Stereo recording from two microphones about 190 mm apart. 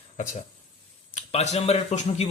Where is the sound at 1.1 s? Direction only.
35° left (ahead or behind).